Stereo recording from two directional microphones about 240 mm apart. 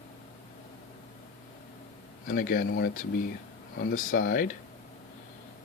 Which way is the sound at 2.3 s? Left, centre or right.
Left.